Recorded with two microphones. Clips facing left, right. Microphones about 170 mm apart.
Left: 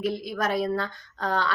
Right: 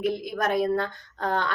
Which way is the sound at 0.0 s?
50° right (ahead or behind).